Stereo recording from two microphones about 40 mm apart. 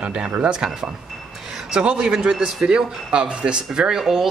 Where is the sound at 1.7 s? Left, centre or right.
Right.